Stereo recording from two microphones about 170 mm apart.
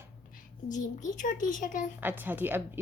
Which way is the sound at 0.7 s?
50° left (ahead or behind).